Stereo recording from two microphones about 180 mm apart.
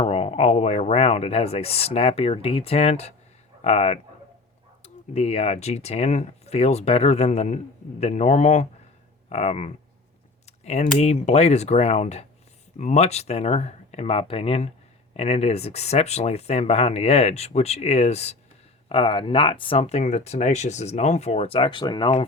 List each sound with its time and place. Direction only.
0.0 s speech: 35° left (ahead or behind)
5.1 s speech: 35° left (ahead or behind)